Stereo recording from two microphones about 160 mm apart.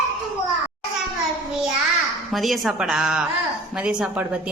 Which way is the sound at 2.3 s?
Centre (ahead or behind).